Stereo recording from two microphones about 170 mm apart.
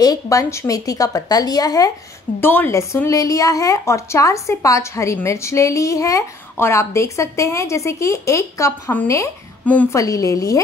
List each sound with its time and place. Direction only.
0.0 s a woman's voice: 20° left (ahead or behind)